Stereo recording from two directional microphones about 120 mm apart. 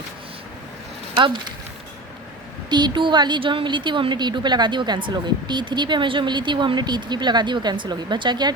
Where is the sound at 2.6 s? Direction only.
40° right (ahead or behind).